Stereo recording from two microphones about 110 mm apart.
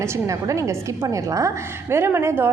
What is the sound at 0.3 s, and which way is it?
A woman's voice, 30° right (ahead or behind).